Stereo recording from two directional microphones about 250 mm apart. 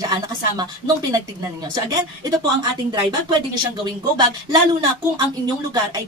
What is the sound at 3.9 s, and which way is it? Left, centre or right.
Speech, centre.